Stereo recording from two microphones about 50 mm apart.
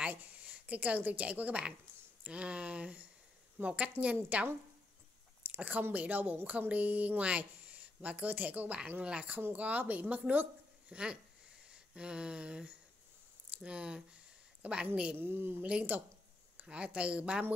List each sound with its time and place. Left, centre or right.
0.0 s a woman's voice: right
5.6 s speech: right
10.9 s speech: right
11.7 s a sound: centre
13.6 s a woman's voice: right
15.1 s a woman's voice: right
15.6 s speech: right